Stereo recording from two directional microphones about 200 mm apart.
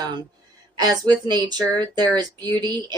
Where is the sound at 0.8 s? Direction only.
20° right (ahead or behind).